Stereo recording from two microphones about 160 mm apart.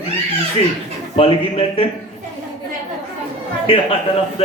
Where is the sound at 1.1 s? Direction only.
35° left (ahead or behind).